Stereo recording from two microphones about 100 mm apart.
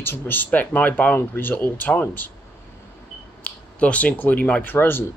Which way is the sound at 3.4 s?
15° left (ahead or behind).